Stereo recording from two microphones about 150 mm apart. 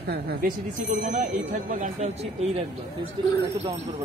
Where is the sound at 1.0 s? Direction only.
55° right (ahead or behind).